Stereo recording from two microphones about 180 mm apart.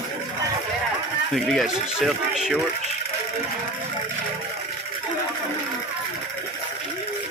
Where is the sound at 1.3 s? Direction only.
Centre (ahead or behind).